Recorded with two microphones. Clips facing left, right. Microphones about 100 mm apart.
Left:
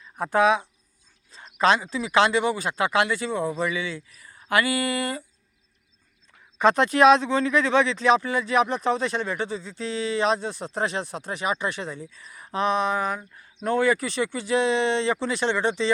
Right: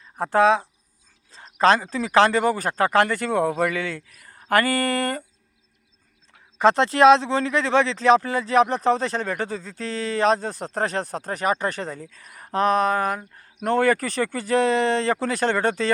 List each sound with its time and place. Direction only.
0.2 s speech: 30° right (ahead or behind); by 5.2 s 50° right (ahead or behind)
6.6 s speech: 30° right (ahead or behind); by 15.9 s 45° right (ahead or behind)